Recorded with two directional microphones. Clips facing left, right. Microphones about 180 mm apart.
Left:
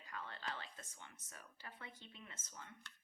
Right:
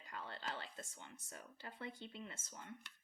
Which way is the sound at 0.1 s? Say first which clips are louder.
Right 1 dB; 30° right (ahead or behind).